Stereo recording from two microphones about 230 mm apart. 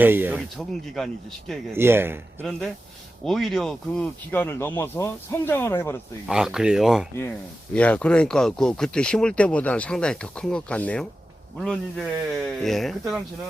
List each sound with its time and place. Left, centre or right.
0.0 s speech: centre
1.7 s speech: centre
2.4 s speech: centre
6.2 s speech: centre